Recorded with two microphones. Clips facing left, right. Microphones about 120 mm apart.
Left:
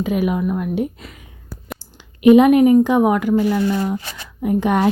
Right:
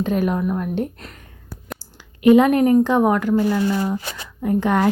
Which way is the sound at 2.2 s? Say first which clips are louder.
Left 3 dB; 15° left (ahead or behind).